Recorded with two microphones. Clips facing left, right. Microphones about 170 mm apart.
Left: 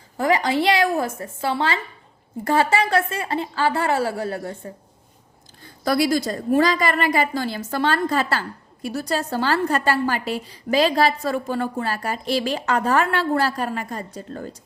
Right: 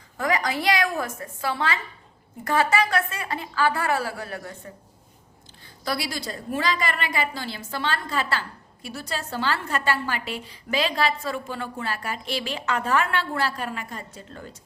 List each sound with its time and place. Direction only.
0.2 s a woman's voice: 30° left (ahead or behind)
5.8 s a woman's voice: 45° left (ahead or behind)